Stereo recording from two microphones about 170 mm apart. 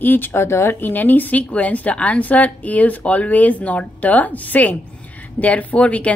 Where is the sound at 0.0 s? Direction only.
10° left (ahead or behind).